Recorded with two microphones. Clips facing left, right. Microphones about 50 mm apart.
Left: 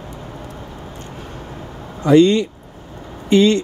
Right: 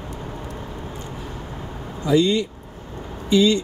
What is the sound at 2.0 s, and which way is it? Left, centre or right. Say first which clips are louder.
Speech: left 6 dB; left.